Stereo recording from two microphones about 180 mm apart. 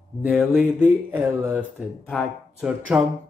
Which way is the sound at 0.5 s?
10° right (ahead or behind).